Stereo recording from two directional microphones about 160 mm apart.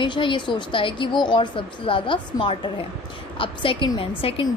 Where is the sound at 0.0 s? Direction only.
30° left (ahead or behind).